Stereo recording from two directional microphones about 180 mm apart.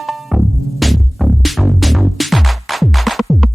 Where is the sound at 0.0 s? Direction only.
Centre (ahead or behind).